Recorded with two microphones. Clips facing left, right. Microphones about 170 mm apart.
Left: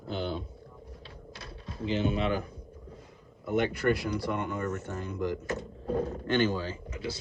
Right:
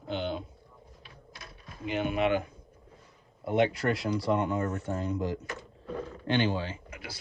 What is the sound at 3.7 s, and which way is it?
Speech, 60° left (ahead or behind).